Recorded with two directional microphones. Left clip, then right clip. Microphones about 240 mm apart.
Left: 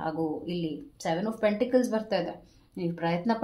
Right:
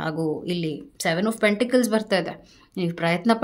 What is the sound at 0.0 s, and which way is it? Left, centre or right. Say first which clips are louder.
Speech: right 4 dB; right.